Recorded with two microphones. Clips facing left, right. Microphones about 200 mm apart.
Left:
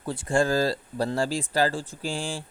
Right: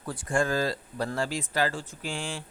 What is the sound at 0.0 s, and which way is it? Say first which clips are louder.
Speech: left 4 dB; 25° left (ahead or behind).